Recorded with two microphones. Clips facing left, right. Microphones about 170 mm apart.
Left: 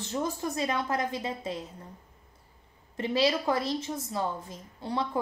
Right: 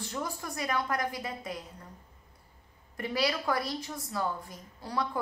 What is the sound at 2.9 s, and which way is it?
A woman's voice, 25° left (ahead or behind).